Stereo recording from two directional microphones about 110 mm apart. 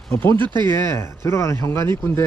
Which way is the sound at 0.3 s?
45° right (ahead or behind).